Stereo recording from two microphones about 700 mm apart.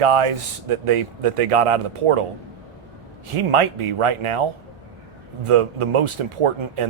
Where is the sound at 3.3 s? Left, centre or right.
Right.